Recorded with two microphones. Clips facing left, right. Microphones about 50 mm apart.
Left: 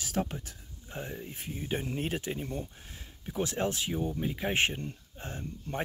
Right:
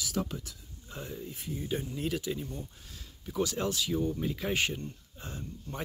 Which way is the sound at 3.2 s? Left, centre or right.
Left.